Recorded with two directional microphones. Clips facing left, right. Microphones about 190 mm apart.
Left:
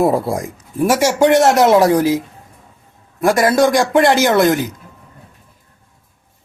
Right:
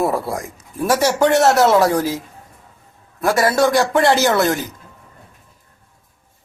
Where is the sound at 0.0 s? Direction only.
20° left (ahead or behind).